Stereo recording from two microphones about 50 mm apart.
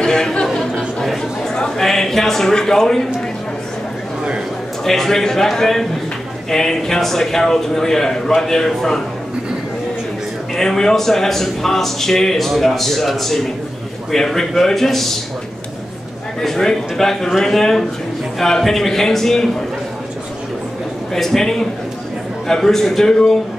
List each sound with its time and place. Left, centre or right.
0.0 s speech: centre
0.6 s a sound: centre
1.0 s a man's voice: centre
4.8 s a man's voice: centre
10.5 s a man's voice: centre
16.3 s a man's voice: centre
21.1 s a man's voice: centre